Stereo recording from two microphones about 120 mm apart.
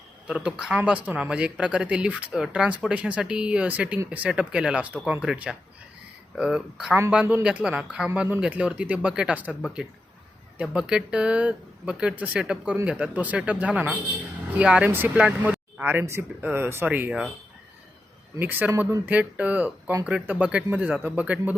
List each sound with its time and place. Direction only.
0.3 s speech: 10° right (ahead or behind)
18.3 s speech: 15° right (ahead or behind)